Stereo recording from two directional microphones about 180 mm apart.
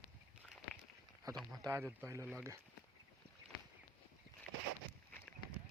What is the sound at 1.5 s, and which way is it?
Speech, 15° right (ahead or behind).